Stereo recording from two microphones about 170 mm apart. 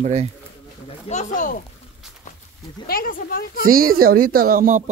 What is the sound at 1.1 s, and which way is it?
Speech, 45° left (ahead or behind).